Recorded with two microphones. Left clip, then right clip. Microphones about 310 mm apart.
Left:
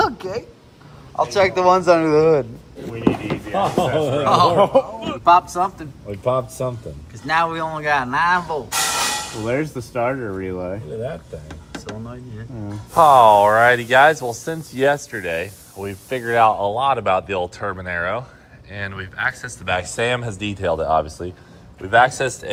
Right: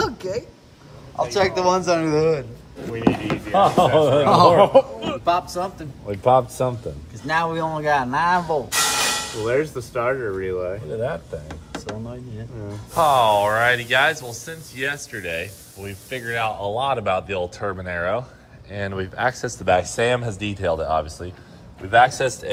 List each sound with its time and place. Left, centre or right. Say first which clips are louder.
0.0 s a sound: left 4 dB; centre
1.1 s speech: left 3 dB; centre
4.3 s speech: even; centre
4.7 s speech: right 1 dB; centre
8.3 s speech: left 1 dB; centre
10.3 s speech: right 2 dB; left
11.0 s speech: right 3 dB; centre